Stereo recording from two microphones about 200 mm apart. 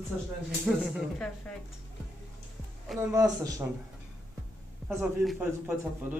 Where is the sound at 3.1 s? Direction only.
15° right (ahead or behind).